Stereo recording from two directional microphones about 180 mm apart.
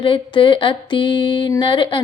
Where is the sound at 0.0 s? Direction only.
30° left (ahead or behind).